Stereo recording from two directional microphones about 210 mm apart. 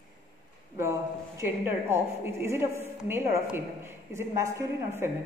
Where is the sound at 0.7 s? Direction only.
10° right (ahead or behind).